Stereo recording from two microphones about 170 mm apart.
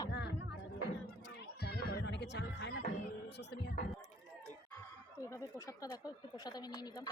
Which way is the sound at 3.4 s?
85° left.